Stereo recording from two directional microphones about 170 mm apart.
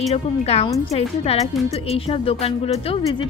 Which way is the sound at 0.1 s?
40° left (ahead or behind).